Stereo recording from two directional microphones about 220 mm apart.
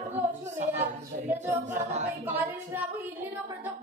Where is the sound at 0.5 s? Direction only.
35° right (ahead or behind).